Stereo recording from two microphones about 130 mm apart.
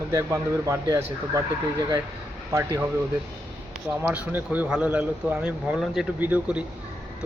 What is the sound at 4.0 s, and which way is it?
Speech, 15° right (ahead or behind).